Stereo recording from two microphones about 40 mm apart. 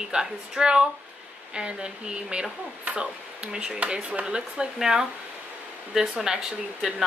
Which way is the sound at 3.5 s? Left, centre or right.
Centre.